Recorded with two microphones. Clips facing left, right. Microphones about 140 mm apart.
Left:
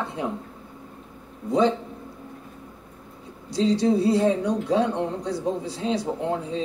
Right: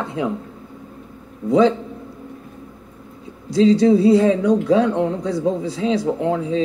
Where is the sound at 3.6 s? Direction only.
90° right.